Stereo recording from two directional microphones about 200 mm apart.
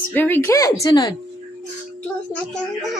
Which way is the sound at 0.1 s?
10° left (ahead or behind).